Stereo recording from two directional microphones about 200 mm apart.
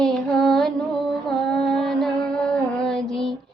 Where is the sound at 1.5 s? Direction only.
Centre (ahead or behind).